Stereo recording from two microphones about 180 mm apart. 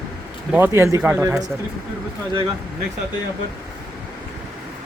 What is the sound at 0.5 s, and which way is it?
Speech, 15° right (ahead or behind).